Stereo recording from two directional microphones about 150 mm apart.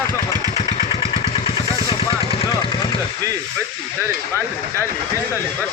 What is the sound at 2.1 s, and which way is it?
Vehicle, 35° left (ahead or behind).